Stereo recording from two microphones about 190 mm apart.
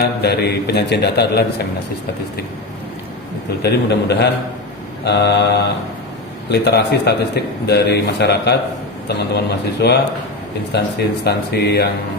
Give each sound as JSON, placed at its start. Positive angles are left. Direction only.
{"t": 0.0, "sound": "a man's voice", "side_deg": 55}
{"t": 3.6, "sound": "a man's voice", "side_deg": 60}